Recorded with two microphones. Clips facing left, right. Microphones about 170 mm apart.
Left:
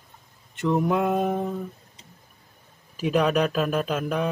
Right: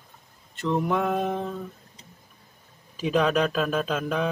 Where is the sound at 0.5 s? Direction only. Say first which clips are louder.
Left 2 dB; 15° left (ahead or behind).